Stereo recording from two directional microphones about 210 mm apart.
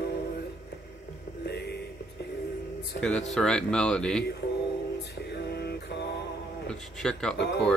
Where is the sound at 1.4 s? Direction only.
50° left (ahead or behind).